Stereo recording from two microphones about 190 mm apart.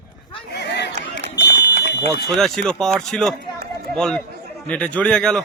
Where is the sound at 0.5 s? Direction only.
60° left (ahead or behind).